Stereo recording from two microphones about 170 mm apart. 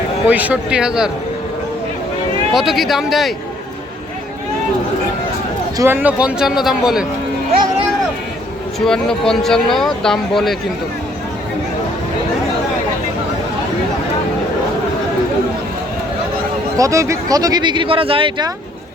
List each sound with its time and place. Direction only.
0.3 s speech: 10° right (ahead or behind)
2.5 s speech: centre (ahead or behind)
5.7 s a man's voice: 15° right (ahead or behind)
8.8 s speech: 5° left (ahead or behind)
16.7 s speech: 20° right (ahead or behind)